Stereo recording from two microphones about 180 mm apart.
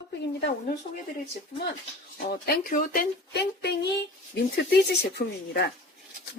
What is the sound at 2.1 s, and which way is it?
Speech, 55° left (ahead or behind).